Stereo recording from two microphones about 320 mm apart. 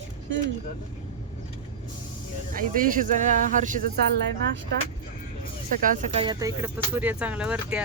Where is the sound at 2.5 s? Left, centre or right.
Right.